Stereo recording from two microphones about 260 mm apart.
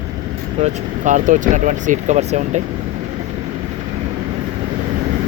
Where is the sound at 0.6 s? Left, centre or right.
Right.